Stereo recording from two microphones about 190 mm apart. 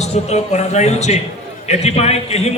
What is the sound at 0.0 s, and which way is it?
A man's voice, 35° left (ahead or behind).